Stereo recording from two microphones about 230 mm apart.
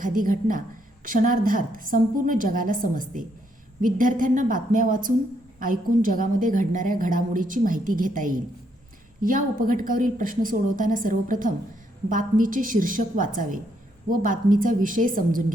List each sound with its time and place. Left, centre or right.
0.0 s a woman's voice: right